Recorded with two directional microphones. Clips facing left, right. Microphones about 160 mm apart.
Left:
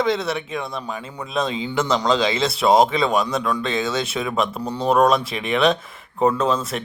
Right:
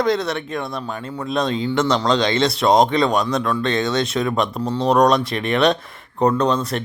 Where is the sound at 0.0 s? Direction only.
Centre (ahead or behind).